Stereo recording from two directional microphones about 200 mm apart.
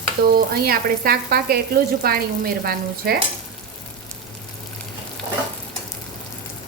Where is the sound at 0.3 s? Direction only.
50° right (ahead or behind).